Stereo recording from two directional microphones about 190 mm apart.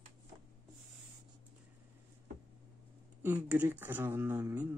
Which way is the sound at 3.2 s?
10° right (ahead or behind).